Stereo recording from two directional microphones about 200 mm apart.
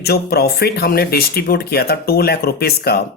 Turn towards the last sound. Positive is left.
turn(degrees=50)  # may be behind; listen again after turning